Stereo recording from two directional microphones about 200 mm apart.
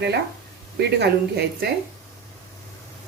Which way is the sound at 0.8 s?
55° right (ahead or behind).